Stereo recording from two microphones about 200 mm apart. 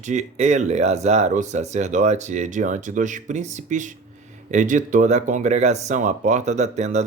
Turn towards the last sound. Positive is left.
turn(degrees=-35)  # may be behind; listen again after turning